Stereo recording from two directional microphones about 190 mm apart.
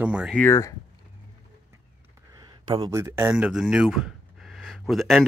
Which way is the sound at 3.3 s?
5° right (ahead or behind).